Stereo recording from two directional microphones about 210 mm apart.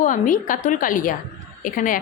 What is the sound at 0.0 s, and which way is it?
A woman's voice, 40° left (ahead or behind).